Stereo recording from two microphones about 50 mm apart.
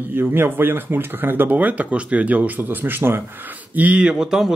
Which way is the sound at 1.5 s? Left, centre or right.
Right.